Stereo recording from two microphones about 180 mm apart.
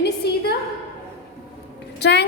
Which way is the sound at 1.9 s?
70° left (ahead or behind).